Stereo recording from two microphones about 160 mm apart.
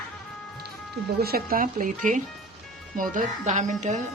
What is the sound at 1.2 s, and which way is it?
A woman's voice, 65° right (ahead or behind).